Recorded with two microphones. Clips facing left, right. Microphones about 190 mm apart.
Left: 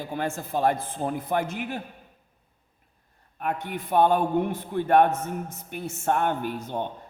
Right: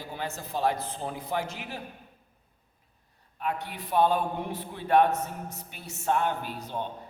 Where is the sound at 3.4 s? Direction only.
50° left (ahead or behind).